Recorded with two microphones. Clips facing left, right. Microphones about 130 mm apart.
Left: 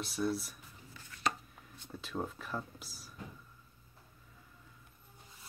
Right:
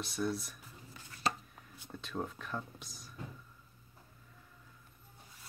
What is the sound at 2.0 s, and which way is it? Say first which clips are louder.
Speech: left 1 dB; 5° left (ahead or behind).